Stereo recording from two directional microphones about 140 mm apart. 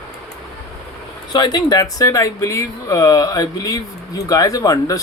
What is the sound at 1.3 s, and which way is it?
Speech, 30° left (ahead or behind).